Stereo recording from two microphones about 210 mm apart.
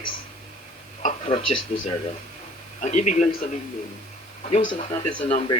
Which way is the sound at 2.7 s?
35° left (ahead or behind).